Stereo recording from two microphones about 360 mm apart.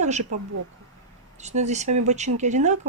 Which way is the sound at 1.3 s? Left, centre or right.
Centre.